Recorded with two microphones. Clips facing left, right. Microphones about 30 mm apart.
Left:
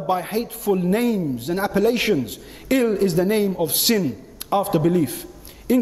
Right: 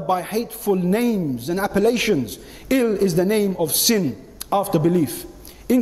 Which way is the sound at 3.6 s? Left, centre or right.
Centre.